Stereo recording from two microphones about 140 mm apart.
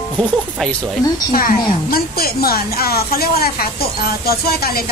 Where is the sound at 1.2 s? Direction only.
90° left.